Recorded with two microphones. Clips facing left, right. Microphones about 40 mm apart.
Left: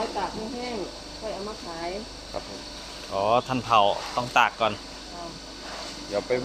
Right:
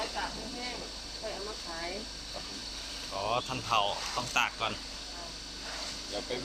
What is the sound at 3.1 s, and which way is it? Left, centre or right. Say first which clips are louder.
Speech: left 10 dB; left.